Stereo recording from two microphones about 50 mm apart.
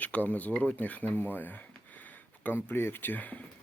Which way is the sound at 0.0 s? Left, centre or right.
Left.